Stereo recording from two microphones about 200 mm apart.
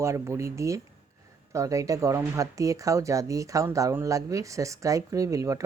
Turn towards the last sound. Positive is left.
turn(degrees=-15)  # may be behind; listen again after turning